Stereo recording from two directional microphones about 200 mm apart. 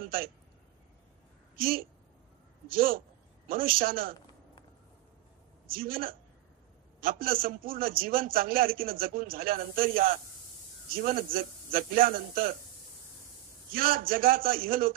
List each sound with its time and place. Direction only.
1.6 s a man's voice: 45° right (ahead or behind)
5.7 s a man's voice: 45° right (ahead or behind)
13.7 s a man's voice: 45° right (ahead or behind)